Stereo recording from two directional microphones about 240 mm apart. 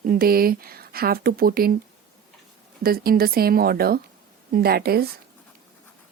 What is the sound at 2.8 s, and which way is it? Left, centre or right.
Speech, right.